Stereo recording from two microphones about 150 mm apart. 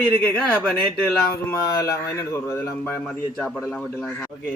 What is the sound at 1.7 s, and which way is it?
Speech, 15° left (ahead or behind).